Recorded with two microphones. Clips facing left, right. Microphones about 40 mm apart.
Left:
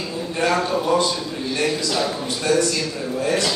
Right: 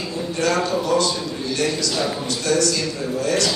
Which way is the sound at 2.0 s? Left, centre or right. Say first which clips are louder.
Even; centre.